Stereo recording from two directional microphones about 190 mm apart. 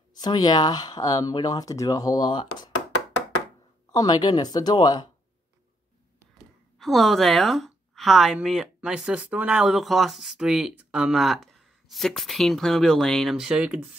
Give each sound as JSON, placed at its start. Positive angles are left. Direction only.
{"t": 0.1, "sound": "speech", "side_deg": 20}
{"t": 3.9, "sound": "speech", "side_deg": 20}
{"t": 6.8, "sound": "a woman's voice", "side_deg": 0}